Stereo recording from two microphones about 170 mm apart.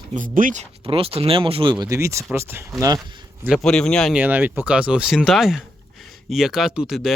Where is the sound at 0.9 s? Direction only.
35° right (ahead or behind).